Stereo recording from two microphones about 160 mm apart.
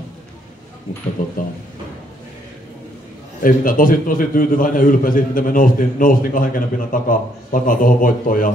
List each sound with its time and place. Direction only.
1.2 s a man's voice: 60° left (ahead or behind)
3.4 s a man's voice: 60° left (ahead or behind)